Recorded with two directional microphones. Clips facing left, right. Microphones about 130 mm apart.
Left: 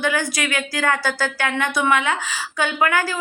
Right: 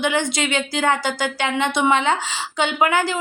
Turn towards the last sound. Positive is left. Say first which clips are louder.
# right 1 dB
turn(degrees=-20)  # may be behind; listen again after turning